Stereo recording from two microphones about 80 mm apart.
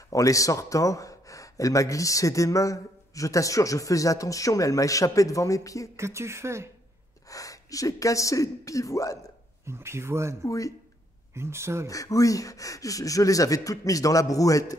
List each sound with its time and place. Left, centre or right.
0.1 s speech: left
5.9 s speech: right
7.2 s speech: left
9.7 s speech: right
10.4 s speech: left
11.3 s speech: right
11.9 s speech: left